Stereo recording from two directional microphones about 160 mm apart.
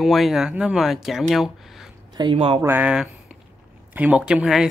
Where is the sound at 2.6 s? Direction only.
10° right (ahead or behind).